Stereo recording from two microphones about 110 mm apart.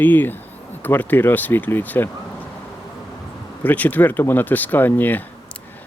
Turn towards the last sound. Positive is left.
turn(degrees=15)  # may be behind; listen again after turning